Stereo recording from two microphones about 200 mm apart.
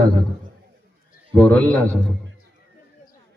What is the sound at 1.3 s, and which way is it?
Speech, 5° left (ahead or behind).